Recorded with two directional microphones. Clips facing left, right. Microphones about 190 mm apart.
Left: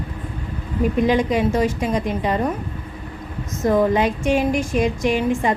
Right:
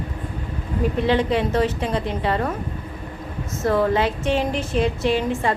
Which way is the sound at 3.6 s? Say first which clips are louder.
Left 2 dB; 15° left (ahead or behind).